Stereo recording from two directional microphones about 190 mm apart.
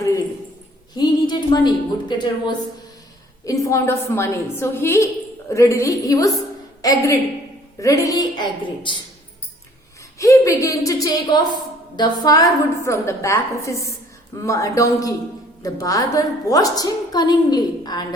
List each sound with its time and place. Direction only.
0.9 s a woman's voice: 25° left (ahead or behind)
10.2 s a woman's voice: 15° left (ahead or behind)